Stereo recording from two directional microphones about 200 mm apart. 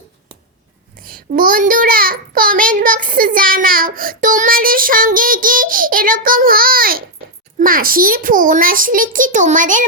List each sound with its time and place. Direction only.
0.9 s a child's voice: 45° right (ahead or behind)